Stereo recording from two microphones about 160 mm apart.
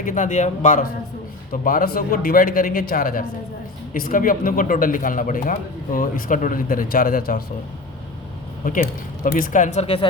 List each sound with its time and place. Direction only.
0.0 s speech: 55° left (ahead or behind)
1.6 s speech: 65° left (ahead or behind)
8.6 s speech: 55° left (ahead or behind)
9.8 s speech: 35° left (ahead or behind)